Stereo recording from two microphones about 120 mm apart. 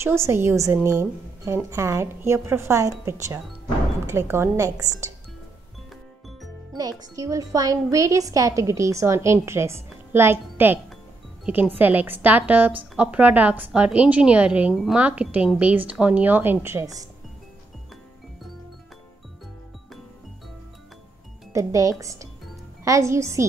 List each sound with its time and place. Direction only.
0.0 s speech: 20° right (ahead or behind)
6.7 s a woman's voice: 30° right (ahead or behind)
21.5 s speech: 25° right (ahead or behind)